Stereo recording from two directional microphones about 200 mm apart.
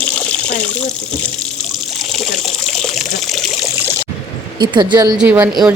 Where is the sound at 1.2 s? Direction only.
5° left (ahead or behind).